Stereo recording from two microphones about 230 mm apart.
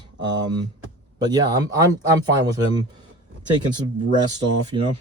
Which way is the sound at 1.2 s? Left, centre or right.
Centre.